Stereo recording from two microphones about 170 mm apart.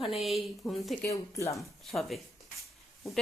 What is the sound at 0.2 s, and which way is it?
Speech, centre (ahead or behind).